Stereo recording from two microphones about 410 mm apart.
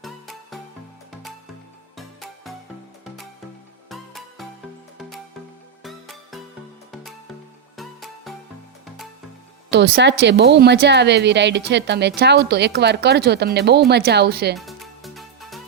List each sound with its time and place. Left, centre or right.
0.0 s music: centre
2.0 s music: centre
3.8 s music: centre
7.8 s music: centre
9.6 s a woman's voice: right
14.5 s music: centre